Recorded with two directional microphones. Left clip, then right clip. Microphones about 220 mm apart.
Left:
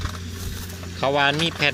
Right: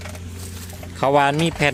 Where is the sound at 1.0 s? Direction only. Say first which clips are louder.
Right 3 dB; 30° right (ahead or behind).